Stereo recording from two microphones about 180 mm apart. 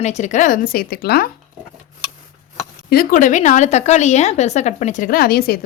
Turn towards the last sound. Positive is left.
turn(degrees=60)  # may be behind; listen again after turning